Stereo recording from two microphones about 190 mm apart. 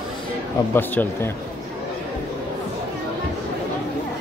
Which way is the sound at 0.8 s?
10° left (ahead or behind).